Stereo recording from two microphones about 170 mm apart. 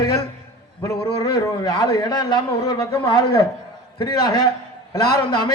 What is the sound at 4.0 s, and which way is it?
A man's voice, 25° left (ahead or behind).